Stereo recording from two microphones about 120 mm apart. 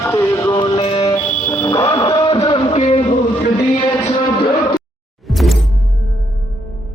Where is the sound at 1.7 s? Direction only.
35° left (ahead or behind); by 3.1 s 55° left (ahead or behind).